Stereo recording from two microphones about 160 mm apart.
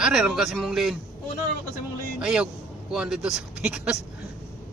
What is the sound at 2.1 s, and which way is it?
Speech, 5° right (ahead or behind).